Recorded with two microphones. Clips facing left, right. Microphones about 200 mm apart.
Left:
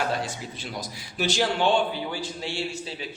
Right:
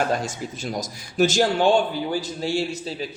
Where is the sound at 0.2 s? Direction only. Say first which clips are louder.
Right 3 dB; 45° right (ahead or behind).